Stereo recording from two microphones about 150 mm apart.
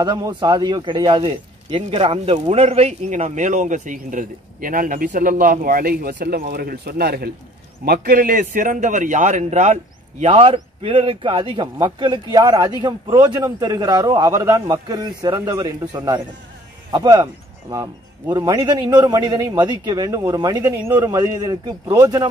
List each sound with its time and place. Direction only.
0.0 s speech: 30° right (ahead or behind); by 7.2 s 90° right
7.8 s speech: 70° right (ahead or behind); by 22.3 s 25° right (ahead or behind)